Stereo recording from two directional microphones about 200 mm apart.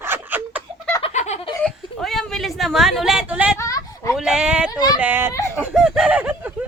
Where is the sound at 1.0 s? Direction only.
35° left (ahead or behind).